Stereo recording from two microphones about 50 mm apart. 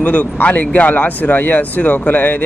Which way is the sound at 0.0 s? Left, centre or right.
Left.